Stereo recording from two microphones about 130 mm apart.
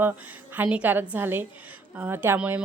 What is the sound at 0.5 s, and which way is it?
A woman's voice, 10° right (ahead or behind).